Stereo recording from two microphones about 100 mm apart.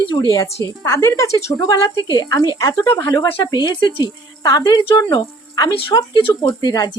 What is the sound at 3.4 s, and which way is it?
Speech, 45° left (ahead or behind).